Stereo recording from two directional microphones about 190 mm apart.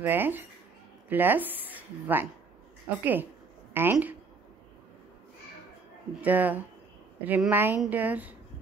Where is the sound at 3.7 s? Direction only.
10° right (ahead or behind).